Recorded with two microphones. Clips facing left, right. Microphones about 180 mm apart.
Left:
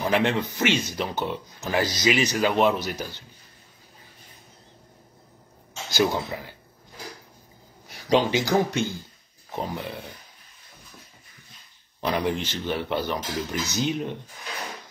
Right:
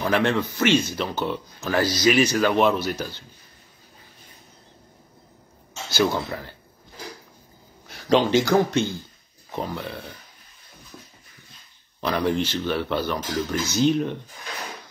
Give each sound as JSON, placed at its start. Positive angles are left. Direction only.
{"t": 0.0, "sound": "speech", "side_deg": 15}
{"t": 5.9, "sound": "speech", "side_deg": 15}
{"t": 7.9, "sound": "speech", "side_deg": 15}
{"t": 12.0, "sound": "speech", "side_deg": 15}